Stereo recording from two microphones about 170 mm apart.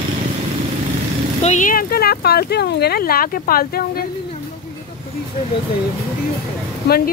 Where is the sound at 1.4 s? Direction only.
45° left (ahead or behind).